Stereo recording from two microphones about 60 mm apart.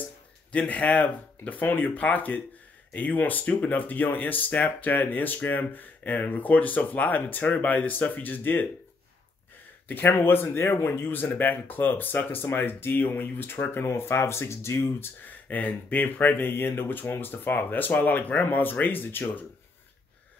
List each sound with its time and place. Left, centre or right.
0.5 s speech: left
9.8 s speech: left
15.4 s speech: left